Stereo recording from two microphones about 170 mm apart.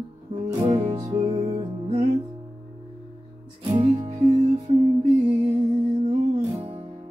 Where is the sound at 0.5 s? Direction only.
30° right (ahead or behind).